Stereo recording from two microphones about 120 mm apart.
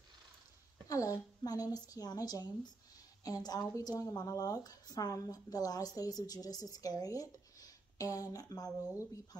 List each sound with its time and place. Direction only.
0.8 s a woman's voice: 30° left (ahead or behind)